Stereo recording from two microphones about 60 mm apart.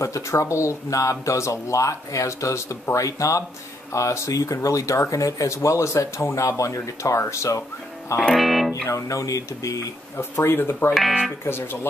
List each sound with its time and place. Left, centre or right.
0.0 s speech: left
8.2 s music: centre
8.8 s speech: left
10.1 s speech: left